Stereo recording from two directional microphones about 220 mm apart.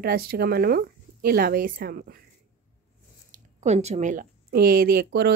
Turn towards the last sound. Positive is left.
turn(degrees=-45)  # may be behind; listen again after turning